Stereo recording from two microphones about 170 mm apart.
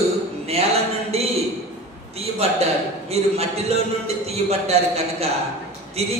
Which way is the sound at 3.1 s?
40° right (ahead or behind).